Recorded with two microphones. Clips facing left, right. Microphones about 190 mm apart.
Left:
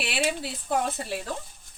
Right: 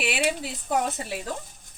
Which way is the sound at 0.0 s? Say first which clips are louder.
Right 2 dB; 15° right (ahead or behind).